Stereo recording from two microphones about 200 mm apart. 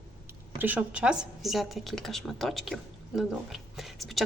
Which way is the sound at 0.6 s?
10° right (ahead or behind).